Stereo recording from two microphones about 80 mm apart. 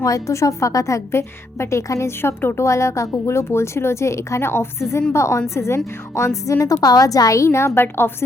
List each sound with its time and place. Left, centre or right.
0.0 s a woman's voice: left